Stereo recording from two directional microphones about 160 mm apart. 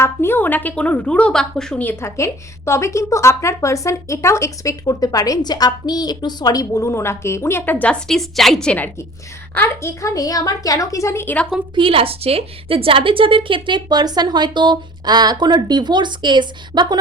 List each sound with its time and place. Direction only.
0.0 s a woman's voice: 15° left (ahead or behind)
11.7 s a woman's voice: 35° right (ahead or behind)